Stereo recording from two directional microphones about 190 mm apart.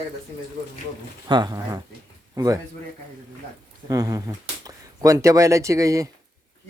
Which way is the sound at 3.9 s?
20° right (ahead or behind).